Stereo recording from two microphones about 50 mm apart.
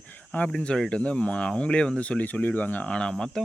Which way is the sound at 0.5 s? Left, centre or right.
Centre.